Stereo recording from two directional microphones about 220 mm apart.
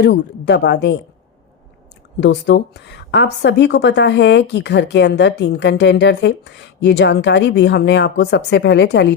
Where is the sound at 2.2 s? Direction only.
50° left (ahead or behind).